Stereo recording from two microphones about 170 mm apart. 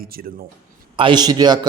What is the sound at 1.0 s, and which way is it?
Speech, 25° right (ahead or behind).